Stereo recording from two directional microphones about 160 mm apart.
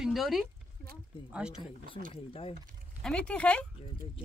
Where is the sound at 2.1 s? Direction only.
35° left (ahead or behind).